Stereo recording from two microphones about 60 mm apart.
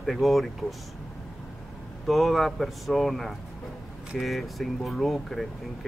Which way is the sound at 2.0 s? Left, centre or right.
Centre.